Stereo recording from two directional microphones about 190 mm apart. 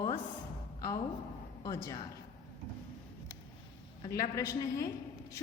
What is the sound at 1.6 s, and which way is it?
Speech, 15° left (ahead or behind).